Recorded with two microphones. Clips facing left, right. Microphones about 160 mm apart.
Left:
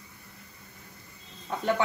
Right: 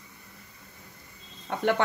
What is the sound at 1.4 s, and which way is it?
Speech, 70° right (ahead or behind).